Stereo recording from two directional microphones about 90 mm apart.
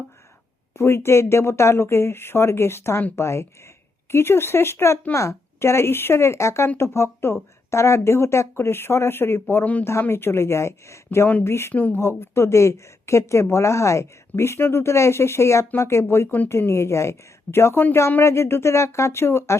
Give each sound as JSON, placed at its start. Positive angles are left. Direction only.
{"t": 0.8, "sound": "a woman's voice", "side_deg": 30}
{"t": 11.7, "sound": "a woman's voice", "side_deg": 20}